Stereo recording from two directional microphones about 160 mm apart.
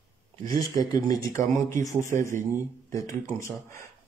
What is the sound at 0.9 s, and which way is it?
A man's voice, 25° left (ahead or behind).